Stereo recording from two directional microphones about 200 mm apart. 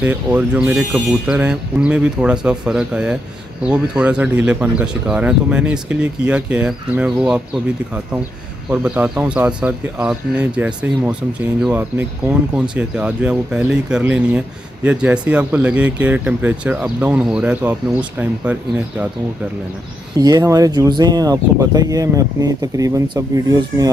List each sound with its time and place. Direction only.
0.0 s speech: 5° right (ahead or behind)
8.6 s speech: 5° right (ahead or behind)
12.5 s speech: 5° right (ahead or behind)
20.2 s speech: 15° right (ahead or behind)